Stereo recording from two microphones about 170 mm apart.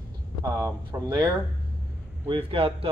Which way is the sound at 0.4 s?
20° right (ahead or behind).